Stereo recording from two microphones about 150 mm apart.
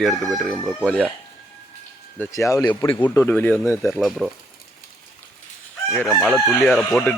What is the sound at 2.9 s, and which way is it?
Speech, 15° left (ahead or behind).